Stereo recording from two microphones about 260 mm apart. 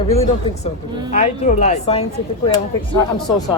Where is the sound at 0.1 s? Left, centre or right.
Left.